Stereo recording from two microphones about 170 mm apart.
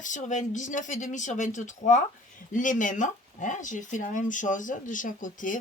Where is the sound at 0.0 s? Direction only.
45° left (ahead or behind).